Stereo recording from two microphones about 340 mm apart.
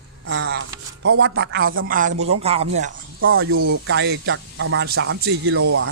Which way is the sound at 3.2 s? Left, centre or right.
Right.